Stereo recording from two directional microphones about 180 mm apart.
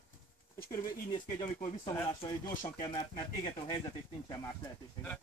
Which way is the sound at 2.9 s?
30° left (ahead or behind).